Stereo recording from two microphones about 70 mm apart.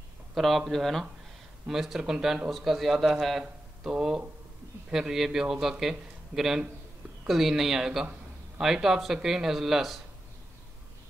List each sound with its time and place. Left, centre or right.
0.3 s speech: centre